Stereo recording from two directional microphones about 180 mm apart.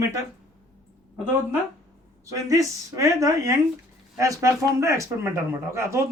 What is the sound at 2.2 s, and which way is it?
Speech, 20° right (ahead or behind).